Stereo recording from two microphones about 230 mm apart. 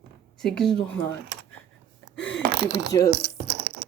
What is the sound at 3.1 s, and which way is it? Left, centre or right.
Speech, right.